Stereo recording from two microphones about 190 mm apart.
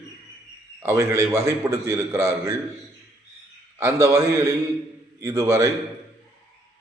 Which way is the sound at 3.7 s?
15° right (ahead or behind).